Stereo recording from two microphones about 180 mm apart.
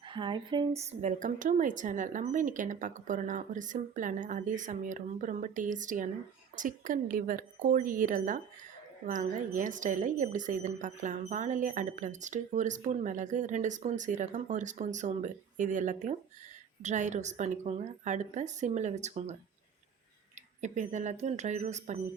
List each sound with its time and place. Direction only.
0.1 s a woman's voice: 25° right (ahead or behind)
20.6 s a woman's voice: 40° right (ahead or behind)